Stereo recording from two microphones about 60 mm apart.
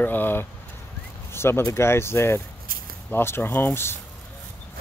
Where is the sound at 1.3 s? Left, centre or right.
Left.